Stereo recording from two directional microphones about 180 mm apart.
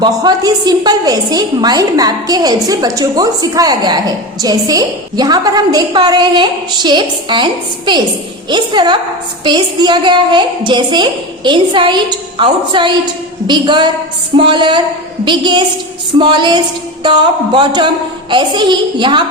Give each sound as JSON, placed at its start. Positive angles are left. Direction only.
{"t": 0.0, "sound": "a woman's voice", "side_deg": -25}